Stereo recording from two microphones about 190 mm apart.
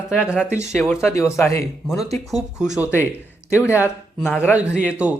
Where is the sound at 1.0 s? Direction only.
15° left (ahead or behind).